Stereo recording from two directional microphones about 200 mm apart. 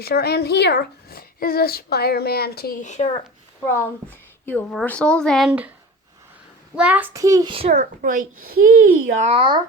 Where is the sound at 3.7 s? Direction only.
10° left (ahead or behind); by 5.7 s 5° right (ahead or behind).